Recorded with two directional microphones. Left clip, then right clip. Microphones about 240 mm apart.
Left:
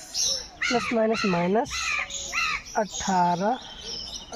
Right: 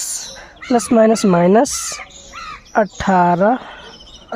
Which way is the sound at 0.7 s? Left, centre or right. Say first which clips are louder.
Right 12 dB; right.